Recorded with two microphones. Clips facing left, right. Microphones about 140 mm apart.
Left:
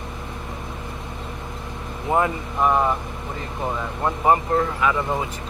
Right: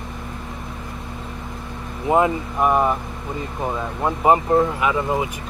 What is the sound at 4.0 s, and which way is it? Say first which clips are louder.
Speech: right 2 dB; 20° right (ahead or behind).